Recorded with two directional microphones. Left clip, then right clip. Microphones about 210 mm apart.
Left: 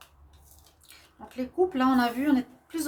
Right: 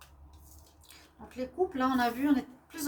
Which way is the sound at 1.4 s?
45° left (ahead or behind).